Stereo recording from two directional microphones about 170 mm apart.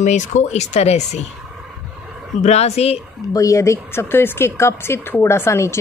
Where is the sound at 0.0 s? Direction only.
45° left (ahead or behind).